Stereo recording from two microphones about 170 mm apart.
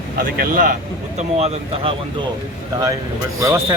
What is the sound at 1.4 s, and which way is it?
Speech, 40° right (ahead or behind).